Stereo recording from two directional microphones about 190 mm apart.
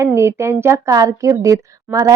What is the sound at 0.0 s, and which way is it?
A woman's voice, 15° right (ahead or behind).